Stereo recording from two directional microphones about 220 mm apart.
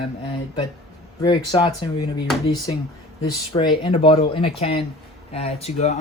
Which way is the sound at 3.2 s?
25° left (ahead or behind).